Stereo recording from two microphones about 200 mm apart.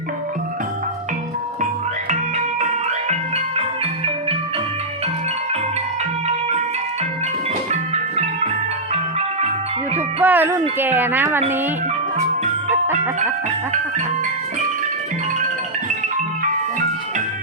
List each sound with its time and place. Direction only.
8.9 s music: 30° right (ahead or behind)
10.2 s speech: 10° right (ahead or behind)